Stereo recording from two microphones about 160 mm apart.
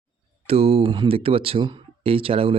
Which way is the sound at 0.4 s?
40° right (ahead or behind).